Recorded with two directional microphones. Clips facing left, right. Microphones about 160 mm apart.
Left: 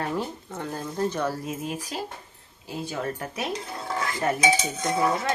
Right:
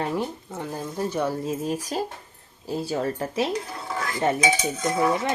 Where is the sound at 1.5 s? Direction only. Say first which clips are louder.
Right 5 dB; 40° right (ahead or behind).